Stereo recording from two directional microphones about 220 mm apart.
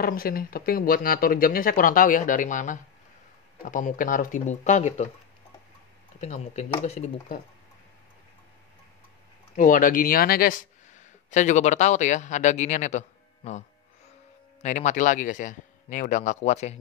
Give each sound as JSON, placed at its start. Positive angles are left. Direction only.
{"t": 0.0, "sound": "speech", "side_deg": 40}
{"t": 6.2, "sound": "speech", "side_deg": 30}
{"t": 9.6, "sound": "speech", "side_deg": 35}